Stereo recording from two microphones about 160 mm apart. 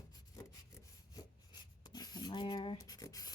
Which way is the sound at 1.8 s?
25° left (ahead or behind).